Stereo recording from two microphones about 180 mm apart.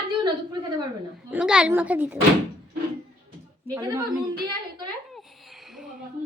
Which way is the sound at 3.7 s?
20° right (ahead or behind).